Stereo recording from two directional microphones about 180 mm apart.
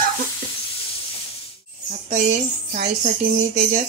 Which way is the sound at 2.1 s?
45° right (ahead or behind).